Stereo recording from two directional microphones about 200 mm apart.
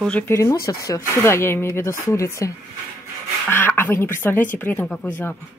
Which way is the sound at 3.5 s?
10° left (ahead or behind).